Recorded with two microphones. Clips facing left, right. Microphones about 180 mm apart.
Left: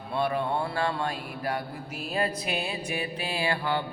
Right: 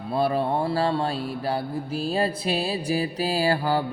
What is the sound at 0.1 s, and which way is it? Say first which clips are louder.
Mantra: right 4 dB; 35° right (ahead or behind).